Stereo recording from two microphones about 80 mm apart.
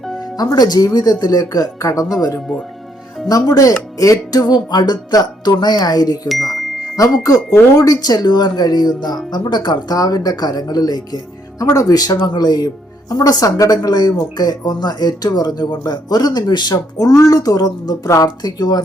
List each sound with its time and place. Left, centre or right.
0.3 s speech: left
3.2 s a woman's voice: left
6.2 s music: centre
6.9 s a woman's voice: left
11.6 s a woman's voice: left